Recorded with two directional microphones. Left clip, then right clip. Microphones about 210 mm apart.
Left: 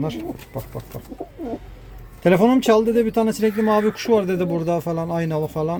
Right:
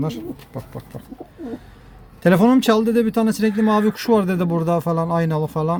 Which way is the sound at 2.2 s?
10° right (ahead or behind).